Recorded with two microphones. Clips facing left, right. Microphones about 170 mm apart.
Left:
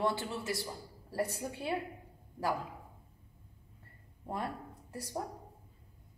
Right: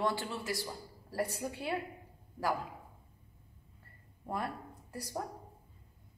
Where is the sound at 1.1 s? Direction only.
20° left (ahead or behind).